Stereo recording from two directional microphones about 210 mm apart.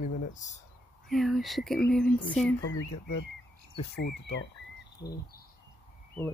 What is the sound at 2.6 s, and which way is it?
Speech, 55° left (ahead or behind).